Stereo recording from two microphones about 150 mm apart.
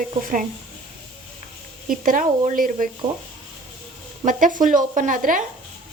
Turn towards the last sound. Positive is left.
turn(degrees=-65)  # may be behind; listen again after turning